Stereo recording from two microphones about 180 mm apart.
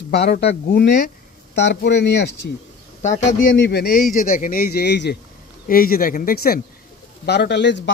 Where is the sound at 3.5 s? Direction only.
75° left (ahead or behind).